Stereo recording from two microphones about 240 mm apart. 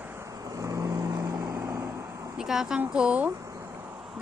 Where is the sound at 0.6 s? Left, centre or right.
Centre.